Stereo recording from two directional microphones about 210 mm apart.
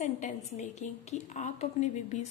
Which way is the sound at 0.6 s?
35° left (ahead or behind).